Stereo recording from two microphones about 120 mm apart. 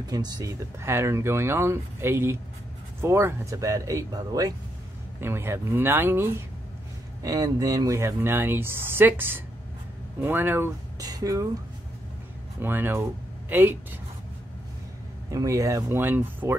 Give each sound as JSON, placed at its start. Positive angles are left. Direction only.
{"t": 0.0, "sound": "speech", "side_deg": -35}
{"t": 5.2, "sound": "speech", "side_deg": -20}
{"t": 7.2, "sound": "speech", "side_deg": -30}
{"t": 11.0, "sound": "speech", "side_deg": -30}
{"t": 12.5, "sound": "speech", "side_deg": -15}
{"t": 15.3, "sound": "speech", "side_deg": -25}